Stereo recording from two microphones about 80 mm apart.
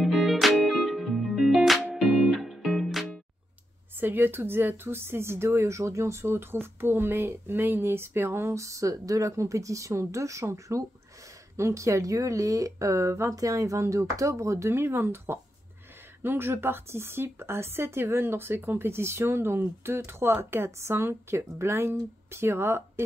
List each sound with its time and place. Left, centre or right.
0.0 s music: centre
4.0 s speech: right